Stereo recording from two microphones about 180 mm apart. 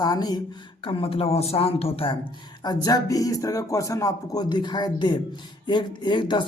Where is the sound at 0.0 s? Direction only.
20° left (ahead or behind).